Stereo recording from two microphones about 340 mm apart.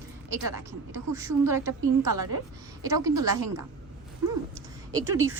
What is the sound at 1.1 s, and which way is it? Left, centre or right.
Speech, centre.